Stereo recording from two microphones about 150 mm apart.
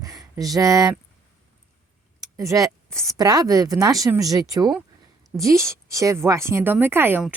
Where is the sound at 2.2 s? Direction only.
20° right (ahead or behind).